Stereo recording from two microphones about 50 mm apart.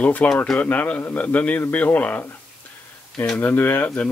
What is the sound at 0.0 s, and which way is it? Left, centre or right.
Speech, left.